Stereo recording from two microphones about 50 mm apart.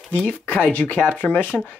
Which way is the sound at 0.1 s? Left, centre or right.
Left.